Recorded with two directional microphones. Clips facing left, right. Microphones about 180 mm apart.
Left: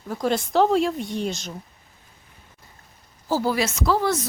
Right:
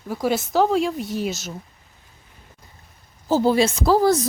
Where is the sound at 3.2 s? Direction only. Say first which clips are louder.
Right 5 dB; 25° right (ahead or behind).